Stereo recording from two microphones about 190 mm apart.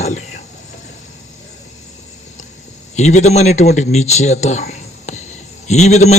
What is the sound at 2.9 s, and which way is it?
A man's voice, 35° left (ahead or behind).